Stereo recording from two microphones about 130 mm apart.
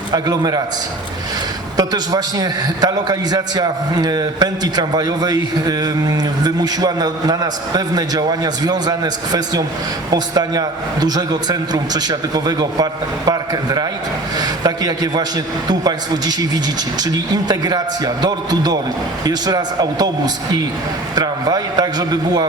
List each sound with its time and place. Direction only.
0.1 s a man's voice: 30° right (ahead or behind)
1.7 s a man's voice: 30° right (ahead or behind)